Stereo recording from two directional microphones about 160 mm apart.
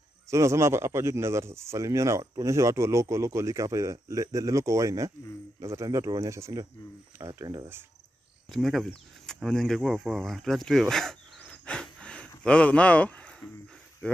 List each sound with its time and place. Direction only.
0.3 s speech: 20° right (ahead or behind)
8.5 s speech: centre (ahead or behind)